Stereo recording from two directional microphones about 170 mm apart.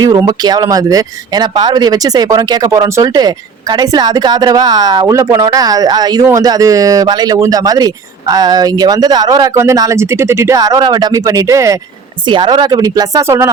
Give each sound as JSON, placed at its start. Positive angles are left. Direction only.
{"t": 0.0, "sound": "speech", "side_deg": -20}